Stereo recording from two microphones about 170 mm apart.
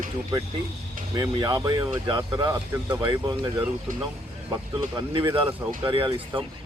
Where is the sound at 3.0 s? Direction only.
30° right (ahead or behind).